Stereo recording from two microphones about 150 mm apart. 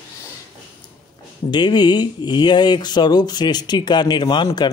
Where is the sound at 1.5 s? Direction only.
30° left (ahead or behind).